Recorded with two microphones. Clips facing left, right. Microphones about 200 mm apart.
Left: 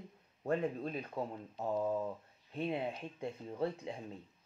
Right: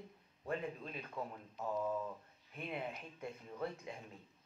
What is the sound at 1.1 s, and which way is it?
Speech, 25° left (ahead or behind).